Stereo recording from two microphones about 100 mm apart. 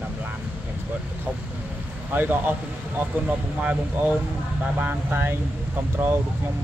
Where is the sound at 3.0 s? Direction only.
15° right (ahead or behind).